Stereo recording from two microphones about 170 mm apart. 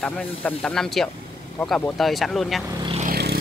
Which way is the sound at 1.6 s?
10° left (ahead or behind).